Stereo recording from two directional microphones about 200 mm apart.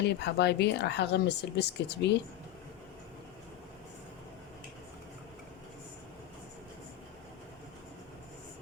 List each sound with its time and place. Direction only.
0.0 s speech: 55° left (ahead or behind)